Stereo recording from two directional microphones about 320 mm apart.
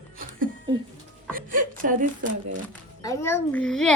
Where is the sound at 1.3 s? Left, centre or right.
Right.